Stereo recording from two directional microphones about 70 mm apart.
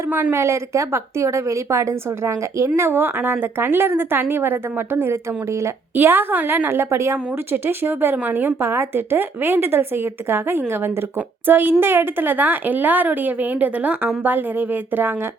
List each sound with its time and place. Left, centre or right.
0.1 s a woman's voice: right
0.3 s a woman's voice: right
5.6 s a woman's voice: right
7.5 s a woman's voice: right